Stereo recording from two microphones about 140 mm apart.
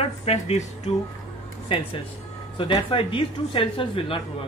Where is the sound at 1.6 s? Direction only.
40° left (ahead or behind).